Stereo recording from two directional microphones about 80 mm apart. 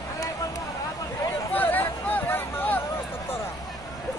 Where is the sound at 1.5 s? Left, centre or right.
Left.